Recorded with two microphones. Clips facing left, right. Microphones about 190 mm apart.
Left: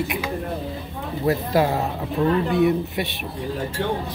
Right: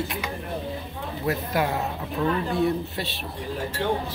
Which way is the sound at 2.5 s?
15° left (ahead or behind).